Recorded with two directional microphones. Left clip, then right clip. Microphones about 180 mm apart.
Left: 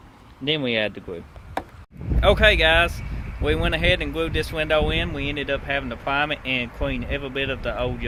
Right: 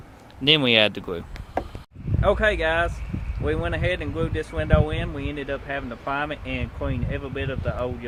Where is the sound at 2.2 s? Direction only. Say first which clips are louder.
Left 4 dB; 20° left (ahead or behind).